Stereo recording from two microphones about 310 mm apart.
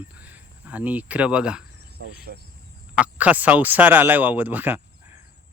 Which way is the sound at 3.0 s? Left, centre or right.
Centre.